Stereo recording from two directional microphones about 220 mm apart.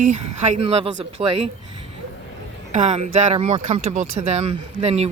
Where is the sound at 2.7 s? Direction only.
30° right (ahead or behind).